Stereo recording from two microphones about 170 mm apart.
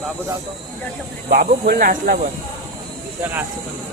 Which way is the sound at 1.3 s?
60° right (ahead or behind).